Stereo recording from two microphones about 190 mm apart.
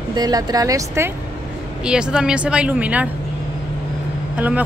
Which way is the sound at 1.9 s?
5° right (ahead or behind).